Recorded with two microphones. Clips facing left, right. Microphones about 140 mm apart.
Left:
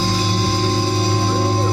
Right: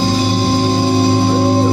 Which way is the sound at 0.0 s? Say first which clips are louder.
Right 5 dB; 20° right (ahead or behind).